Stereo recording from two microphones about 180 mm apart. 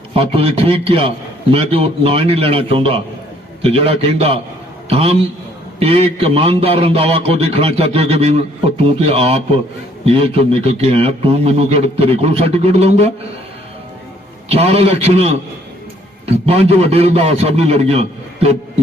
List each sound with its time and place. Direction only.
0.1 s a man's voice: 30° right (ahead or behind)
14.5 s a man's voice: 35° right (ahead or behind)